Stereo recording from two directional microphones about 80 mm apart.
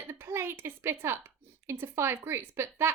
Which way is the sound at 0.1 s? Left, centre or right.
Right.